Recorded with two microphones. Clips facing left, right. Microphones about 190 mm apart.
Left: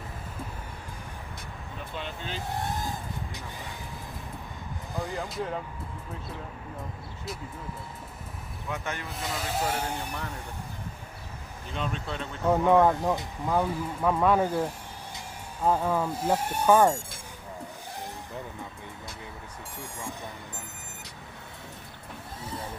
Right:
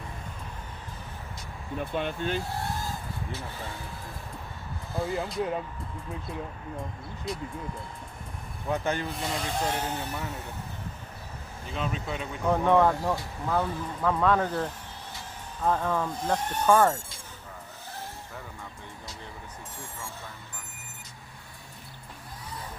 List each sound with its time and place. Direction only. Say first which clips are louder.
1.8 s speech: right 8 dB; 55° right (ahead or behind)
2.5 s vehicle: left 1 dB; 20° left (ahead or behind)
4.9 s speech: right 3 dB; 15° left (ahead or behind)
7.3 s speech: right 4 dB; centre (ahead or behind)
8.7 s speech: right 6 dB; 35° right (ahead or behind)
9.0 s speech: right 2 dB; centre (ahead or behind)
11.7 s speech: right 1 dB; 5° right (ahead or behind)
12.5 s speech: left 1 dB; 10° left (ahead or behind)
19.8 s a sound: left 5 dB; 15° left (ahead or behind)